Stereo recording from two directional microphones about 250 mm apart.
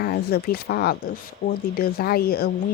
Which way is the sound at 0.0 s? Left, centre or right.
Left.